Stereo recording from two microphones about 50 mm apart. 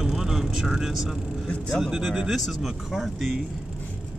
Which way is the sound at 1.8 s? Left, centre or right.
Centre.